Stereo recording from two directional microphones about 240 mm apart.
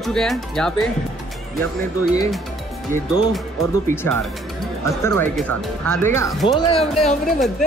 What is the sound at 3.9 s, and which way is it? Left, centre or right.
Speech, centre.